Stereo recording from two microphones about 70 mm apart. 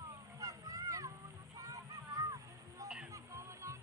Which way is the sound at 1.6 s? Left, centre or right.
Right.